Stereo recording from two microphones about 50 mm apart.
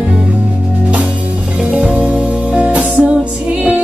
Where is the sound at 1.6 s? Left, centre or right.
Right.